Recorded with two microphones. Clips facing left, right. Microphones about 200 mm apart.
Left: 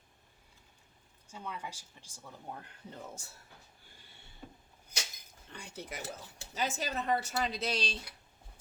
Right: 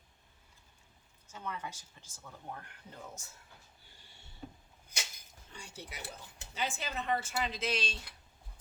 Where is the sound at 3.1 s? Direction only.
30° left (ahead or behind).